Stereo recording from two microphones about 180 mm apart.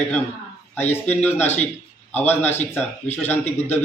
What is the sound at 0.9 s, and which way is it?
A man's voice, 10° left (ahead or behind).